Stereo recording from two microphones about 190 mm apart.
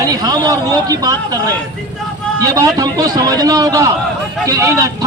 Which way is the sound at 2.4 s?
20° right (ahead or behind).